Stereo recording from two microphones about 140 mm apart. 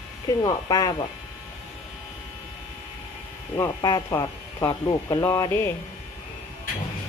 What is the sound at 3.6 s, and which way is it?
A woman's voice, 25° left (ahead or behind).